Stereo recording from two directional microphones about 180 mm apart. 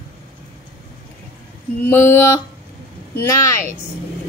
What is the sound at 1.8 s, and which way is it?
A woman's voice, 10° left (ahead or behind).